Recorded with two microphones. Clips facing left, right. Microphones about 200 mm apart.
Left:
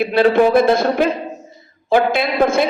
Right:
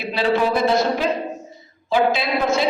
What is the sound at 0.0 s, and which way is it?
A man's voice, 55° left (ahead or behind).